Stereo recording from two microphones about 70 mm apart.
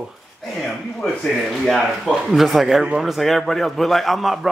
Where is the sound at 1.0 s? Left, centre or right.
Centre.